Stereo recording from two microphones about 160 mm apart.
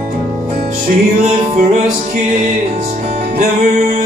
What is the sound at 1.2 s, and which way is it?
Music, 45° right (ahead or behind).